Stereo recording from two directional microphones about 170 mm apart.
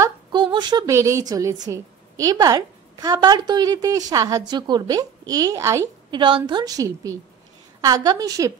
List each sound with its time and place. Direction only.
0.0 s a woman's voice: 25° right (ahead or behind)
6.1 s a woman's voice: 30° right (ahead or behind)